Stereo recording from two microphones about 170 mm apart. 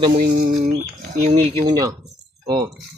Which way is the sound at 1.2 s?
40° right (ahead or behind).